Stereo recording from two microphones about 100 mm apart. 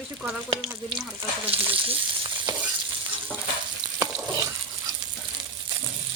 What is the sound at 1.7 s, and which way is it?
Speech, 65° right (ahead or behind).